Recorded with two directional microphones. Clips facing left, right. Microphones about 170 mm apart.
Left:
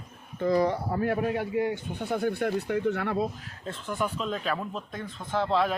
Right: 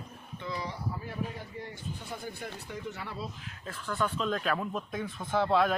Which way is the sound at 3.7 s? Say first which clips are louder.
Left 2 dB; 20° left (ahead or behind).